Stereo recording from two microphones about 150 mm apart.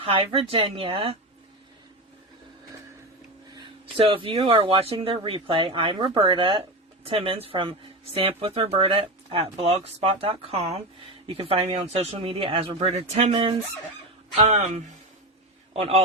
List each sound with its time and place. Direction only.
0.0 s speech: 35° right (ahead or behind)
3.5 s speech: 35° right (ahead or behind)